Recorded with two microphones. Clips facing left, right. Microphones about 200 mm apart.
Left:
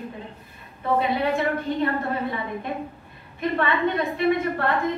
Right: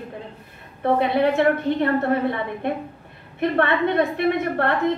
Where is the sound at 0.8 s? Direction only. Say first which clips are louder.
Right 4 dB; 60° right (ahead or behind).